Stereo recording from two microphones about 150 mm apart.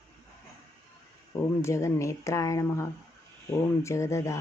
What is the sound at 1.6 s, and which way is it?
Speech, 20° left (ahead or behind).